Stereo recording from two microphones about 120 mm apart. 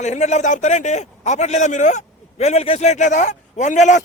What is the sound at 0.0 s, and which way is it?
A man's voice, 80° left.